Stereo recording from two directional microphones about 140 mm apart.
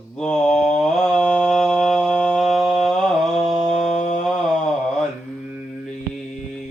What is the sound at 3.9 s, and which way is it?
Mantra, 65° left (ahead or behind).